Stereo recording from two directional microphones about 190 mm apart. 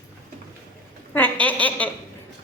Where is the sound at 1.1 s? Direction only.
10° left (ahead or behind).